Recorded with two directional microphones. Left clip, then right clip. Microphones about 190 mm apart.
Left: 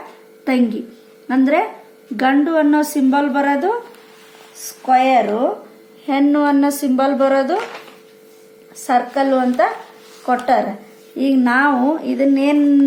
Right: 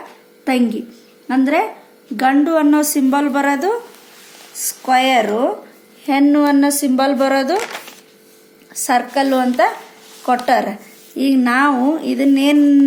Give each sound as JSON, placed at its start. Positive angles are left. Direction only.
{"t": 0.4, "sound": "a woman's voice", "side_deg": -10}
{"t": 4.9, "sound": "a woman's voice", "side_deg": -20}
{"t": 8.9, "sound": "a woman's voice", "side_deg": -15}